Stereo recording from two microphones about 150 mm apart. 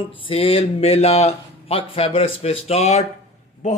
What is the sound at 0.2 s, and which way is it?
A man's voice, 40° left (ahead or behind).